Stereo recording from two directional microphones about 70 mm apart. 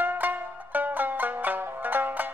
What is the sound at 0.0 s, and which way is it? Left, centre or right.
Music, right.